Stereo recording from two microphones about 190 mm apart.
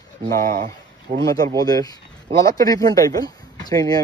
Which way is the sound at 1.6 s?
20° left (ahead or behind).